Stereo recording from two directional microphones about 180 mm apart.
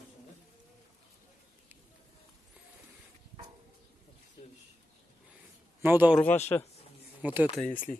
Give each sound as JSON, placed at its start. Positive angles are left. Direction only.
{"t": 5.8, "sound": "a man's voice", "side_deg": -10}
{"t": 6.2, "sound": "a man's voice", "side_deg": 40}
{"t": 7.2, "sound": "speech", "side_deg": -10}
{"t": 7.6, "sound": "speech", "side_deg": 5}